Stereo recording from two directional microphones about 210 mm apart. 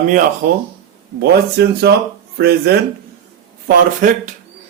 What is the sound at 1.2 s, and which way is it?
Speech, 50° right (ahead or behind).